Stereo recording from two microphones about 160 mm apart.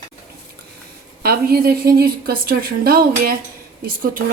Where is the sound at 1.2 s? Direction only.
70° right (ahead or behind).